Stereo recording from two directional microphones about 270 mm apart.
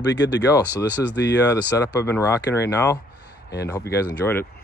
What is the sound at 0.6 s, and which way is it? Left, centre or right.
Speech, centre.